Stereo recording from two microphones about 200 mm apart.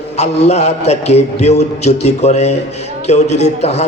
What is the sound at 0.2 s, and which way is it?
A man's voice, 35° left (ahead or behind).